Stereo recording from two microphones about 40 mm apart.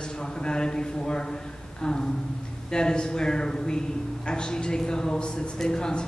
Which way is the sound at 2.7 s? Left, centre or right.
Centre.